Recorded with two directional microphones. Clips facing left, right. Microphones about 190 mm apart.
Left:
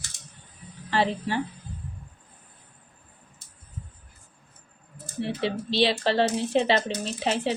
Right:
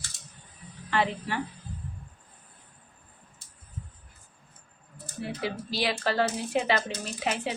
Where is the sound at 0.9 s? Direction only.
30° left (ahead or behind).